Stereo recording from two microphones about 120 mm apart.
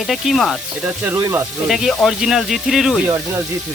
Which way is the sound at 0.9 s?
15° right (ahead or behind).